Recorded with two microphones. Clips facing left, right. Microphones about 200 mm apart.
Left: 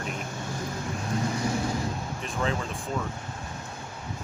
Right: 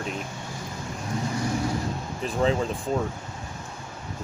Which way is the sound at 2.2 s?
30° right (ahead or behind).